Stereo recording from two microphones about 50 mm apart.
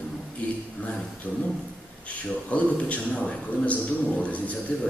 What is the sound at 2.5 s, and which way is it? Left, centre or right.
A man's voice, left.